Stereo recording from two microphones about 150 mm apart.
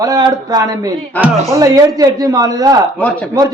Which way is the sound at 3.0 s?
10° left (ahead or behind).